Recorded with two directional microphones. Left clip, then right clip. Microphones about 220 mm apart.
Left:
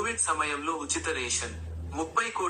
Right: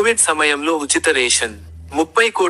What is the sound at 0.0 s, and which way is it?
Speech, 50° right (ahead or behind).